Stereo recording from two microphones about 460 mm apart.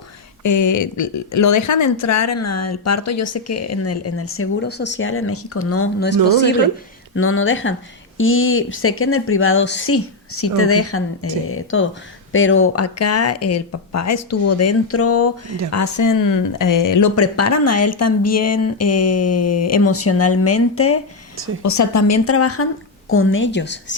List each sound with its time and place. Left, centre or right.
0.4 s speech: left
7.2 s a woman's voice: left